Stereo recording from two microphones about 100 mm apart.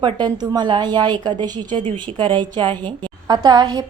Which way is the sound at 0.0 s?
45° right (ahead or behind).